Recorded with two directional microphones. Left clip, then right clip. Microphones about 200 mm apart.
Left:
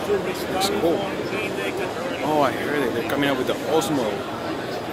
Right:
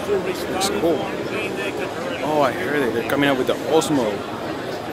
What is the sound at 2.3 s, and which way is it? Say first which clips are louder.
Speech: right 2 dB; 5° right (ahead or behind).